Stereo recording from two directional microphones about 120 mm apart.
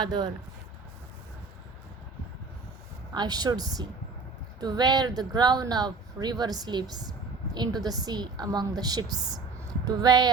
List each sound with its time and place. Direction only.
0.0 s speech: 40° right (ahead or behind)
3.2 s a woman's voice: 35° right (ahead or behind)